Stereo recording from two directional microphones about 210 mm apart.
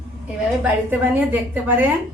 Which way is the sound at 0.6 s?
10° right (ahead or behind).